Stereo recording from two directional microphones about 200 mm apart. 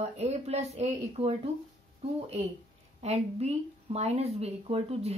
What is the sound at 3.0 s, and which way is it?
Speech, 30° right (ahead or behind).